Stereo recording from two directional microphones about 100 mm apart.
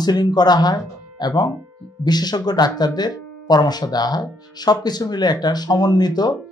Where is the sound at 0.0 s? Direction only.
45° left (ahead or behind).